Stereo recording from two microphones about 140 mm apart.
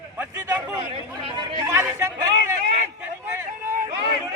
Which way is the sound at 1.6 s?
20° right (ahead or behind).